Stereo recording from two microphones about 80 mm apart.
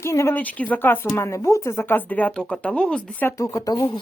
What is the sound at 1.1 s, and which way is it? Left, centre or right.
Speech, left.